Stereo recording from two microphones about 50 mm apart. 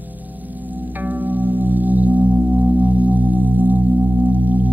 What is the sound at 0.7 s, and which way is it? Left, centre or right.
Singing bowl, right.